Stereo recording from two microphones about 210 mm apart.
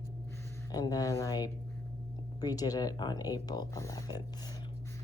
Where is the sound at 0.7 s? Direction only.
20° left (ahead or behind).